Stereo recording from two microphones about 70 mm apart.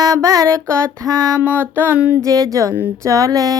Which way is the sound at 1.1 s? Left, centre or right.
Right.